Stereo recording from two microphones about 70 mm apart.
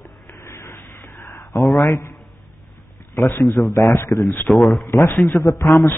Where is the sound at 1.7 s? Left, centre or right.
Left.